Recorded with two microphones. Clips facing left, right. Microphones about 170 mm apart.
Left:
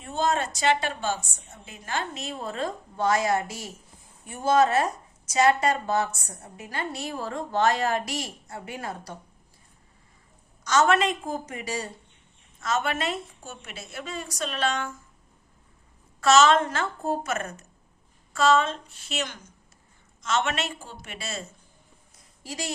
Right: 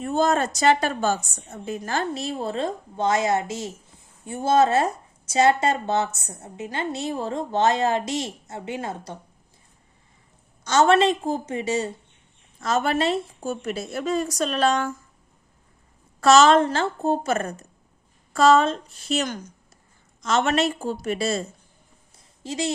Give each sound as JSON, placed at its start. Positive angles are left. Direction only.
{"t": 0.0, "sound": "a woman's voice", "side_deg": -45}
{"t": 10.6, "sound": "speech", "side_deg": -30}
{"t": 12.5, "sound": "a woman's voice", "side_deg": -35}
{"t": 16.2, "sound": "a woman's voice", "side_deg": -35}
{"t": 22.1, "sound": "a sound", "side_deg": -25}